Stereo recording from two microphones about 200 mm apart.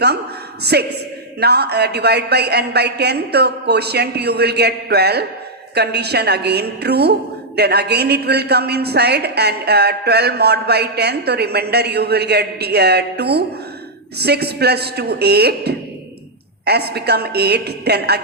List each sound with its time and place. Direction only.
0.6 s a man's voice: 55° right (ahead or behind)